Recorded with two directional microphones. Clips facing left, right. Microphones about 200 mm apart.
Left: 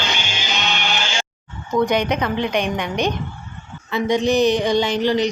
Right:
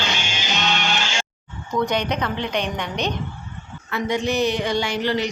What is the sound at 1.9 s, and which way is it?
A woman's voice, 10° left (ahead or behind).